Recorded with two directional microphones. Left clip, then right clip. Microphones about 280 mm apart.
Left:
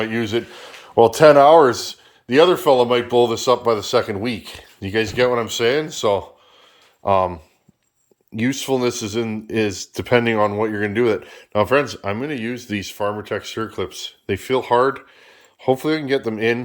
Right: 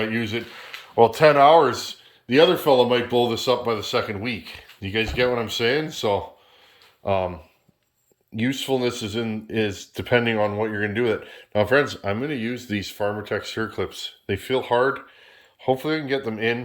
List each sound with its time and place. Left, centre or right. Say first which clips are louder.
0.0 s speech: left 4 dB; centre
2.2 s speech: left 3 dB; centre
8.4 s speech: left 3 dB; centre